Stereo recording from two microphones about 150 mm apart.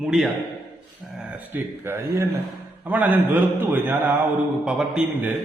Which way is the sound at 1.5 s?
15° right (ahead or behind).